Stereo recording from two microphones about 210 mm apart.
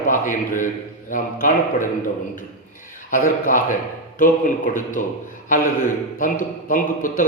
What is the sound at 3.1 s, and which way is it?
A man's voice, 40° left (ahead or behind).